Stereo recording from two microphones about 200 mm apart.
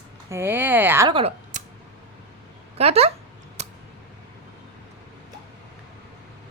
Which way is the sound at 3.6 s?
35° right (ahead or behind).